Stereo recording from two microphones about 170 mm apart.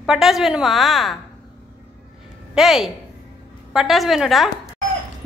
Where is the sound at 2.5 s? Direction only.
Centre (ahead or behind).